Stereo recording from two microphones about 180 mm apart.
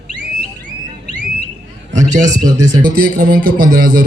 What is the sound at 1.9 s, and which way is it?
A man's voice, 45° right (ahead or behind).